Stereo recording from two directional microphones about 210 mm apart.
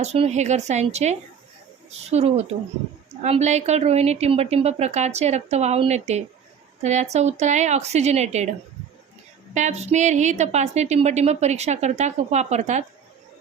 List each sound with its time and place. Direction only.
0.0 s a woman's voice: 30° right (ahead or behind)
9.6 s a woman's voice: 35° right (ahead or behind)